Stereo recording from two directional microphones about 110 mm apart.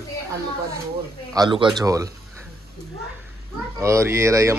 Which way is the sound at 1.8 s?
30° right (ahead or behind).